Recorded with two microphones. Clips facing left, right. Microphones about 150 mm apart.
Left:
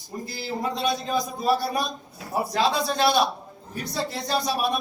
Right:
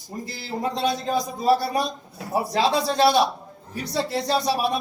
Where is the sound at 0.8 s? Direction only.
35° right (ahead or behind).